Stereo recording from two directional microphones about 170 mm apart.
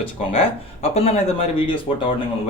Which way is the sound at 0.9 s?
35° left (ahead or behind).